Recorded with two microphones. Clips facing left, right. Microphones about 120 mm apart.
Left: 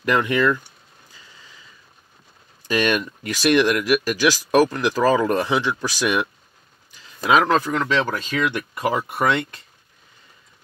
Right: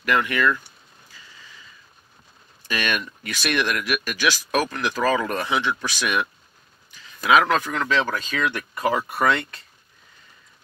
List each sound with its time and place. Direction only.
0.0 s speech: 25° left (ahead or behind)
2.7 s speech: 25° left (ahead or behind)